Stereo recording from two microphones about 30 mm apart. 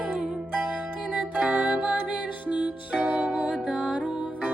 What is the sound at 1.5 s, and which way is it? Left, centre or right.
Music, right.